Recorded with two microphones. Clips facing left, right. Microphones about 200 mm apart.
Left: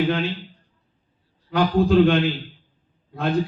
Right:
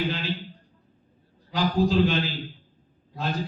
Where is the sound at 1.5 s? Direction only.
60° left (ahead or behind).